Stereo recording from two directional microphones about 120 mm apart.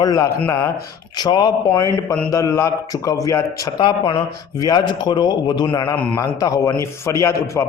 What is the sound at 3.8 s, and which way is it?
Speech, 45° left (ahead or behind).